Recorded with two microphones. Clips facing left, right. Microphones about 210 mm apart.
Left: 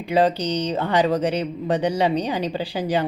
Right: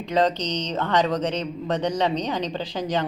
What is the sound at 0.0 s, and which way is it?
Speech, 10° left (ahead or behind).